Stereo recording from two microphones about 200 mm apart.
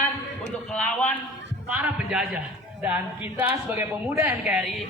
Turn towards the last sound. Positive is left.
turn(degrees=-5)  # may be behind; listen again after turning